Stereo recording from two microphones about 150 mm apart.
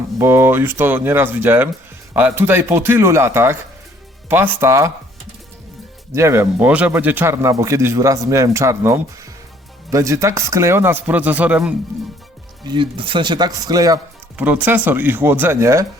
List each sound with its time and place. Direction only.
0.2 s speech: 15° right (ahead or behind)
6.1 s speech: 15° right (ahead or behind)
12.6 s speech: 35° right (ahead or behind)
14.3 s speech: 10° right (ahead or behind)